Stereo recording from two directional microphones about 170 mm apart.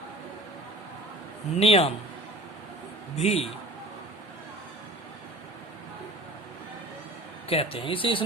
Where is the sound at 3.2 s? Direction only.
35° left (ahead or behind).